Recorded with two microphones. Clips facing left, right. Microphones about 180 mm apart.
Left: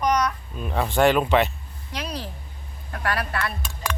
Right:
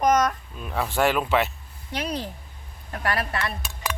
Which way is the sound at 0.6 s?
Centre (ahead or behind).